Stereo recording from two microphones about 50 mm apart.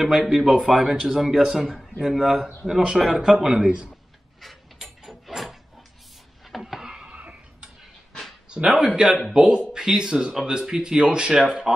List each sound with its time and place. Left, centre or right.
0.0 s a man's voice: centre
0.7 s speech: centre
1.8 s speech: centre
2.1 s speech: centre
4.4 s mechanisms: centre
6.4 s a sound: centre
7.1 s cough: right
8.5 s speech: centre
11.4 s speech: centre